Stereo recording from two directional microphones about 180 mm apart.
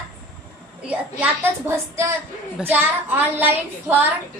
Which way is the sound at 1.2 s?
15° right (ahead or behind).